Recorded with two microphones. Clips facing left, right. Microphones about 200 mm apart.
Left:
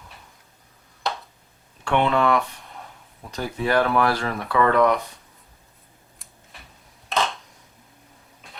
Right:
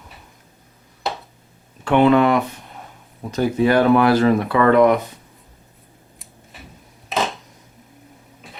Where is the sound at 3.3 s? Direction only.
20° right (ahead or behind).